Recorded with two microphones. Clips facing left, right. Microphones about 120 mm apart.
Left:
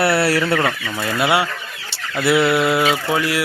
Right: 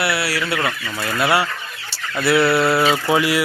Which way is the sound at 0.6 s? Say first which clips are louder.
Left 2 dB; 20° left (ahead or behind).